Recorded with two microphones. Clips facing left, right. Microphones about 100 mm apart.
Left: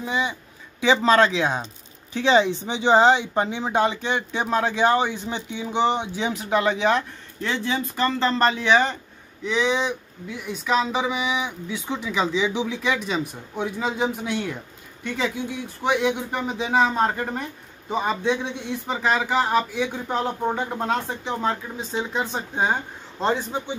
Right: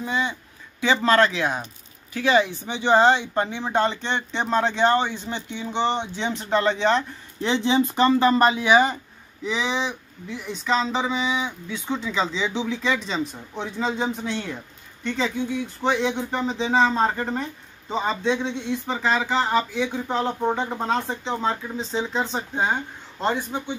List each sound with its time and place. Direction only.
0.0 s speech: 15° left (ahead or behind)
7.4 s speech: 20° right (ahead or behind); by 23.4 s 15° left (ahead or behind)